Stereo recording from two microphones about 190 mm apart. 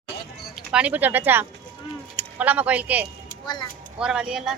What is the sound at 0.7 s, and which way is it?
Speech, 5° right (ahead or behind).